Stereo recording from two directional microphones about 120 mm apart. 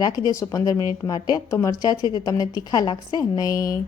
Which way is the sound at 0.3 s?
25° left (ahead or behind).